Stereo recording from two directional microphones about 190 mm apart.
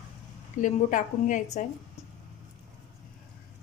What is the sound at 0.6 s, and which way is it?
A woman's voice, 40° left (ahead or behind).